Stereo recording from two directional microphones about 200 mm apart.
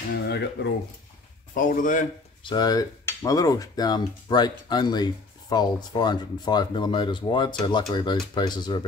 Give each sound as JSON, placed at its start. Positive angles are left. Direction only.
{"t": 0.1, "sound": "speech", "side_deg": 55}
{"t": 1.5, "sound": "speech", "side_deg": 40}
{"t": 2.4, "sound": "speech", "side_deg": 20}